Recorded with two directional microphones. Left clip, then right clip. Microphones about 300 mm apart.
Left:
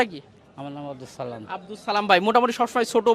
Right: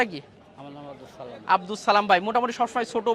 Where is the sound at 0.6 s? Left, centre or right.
Left.